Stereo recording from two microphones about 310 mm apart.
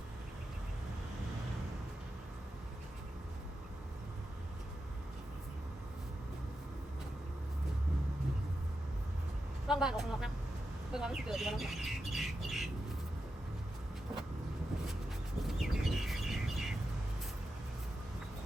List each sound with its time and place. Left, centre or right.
9.6 s speech: centre
15.4 s bird: centre